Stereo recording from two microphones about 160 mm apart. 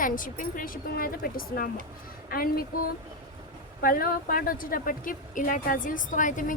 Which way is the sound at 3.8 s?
65° left (ahead or behind).